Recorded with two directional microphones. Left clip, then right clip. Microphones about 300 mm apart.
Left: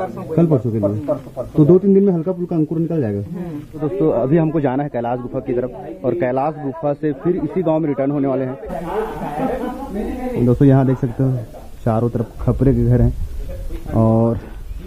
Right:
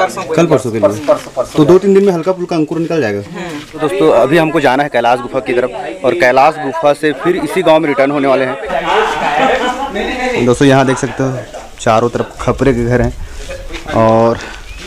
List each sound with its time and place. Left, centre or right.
0.0 s speech: centre